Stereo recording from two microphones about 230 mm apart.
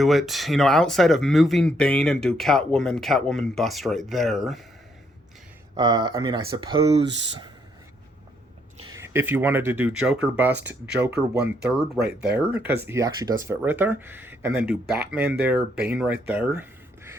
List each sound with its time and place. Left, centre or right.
0.0 s speech: centre
5.7 s speech: centre
9.0 s speech: centre
11.6 s speech: centre